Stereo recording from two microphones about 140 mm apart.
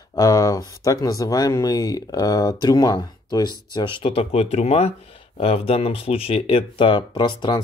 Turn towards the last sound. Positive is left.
turn(degrees=35)  # may be behind; listen again after turning